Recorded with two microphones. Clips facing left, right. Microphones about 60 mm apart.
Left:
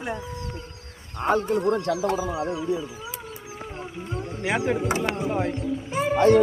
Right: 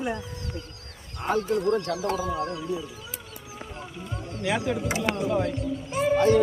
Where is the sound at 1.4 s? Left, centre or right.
Left; by 2.7 s centre.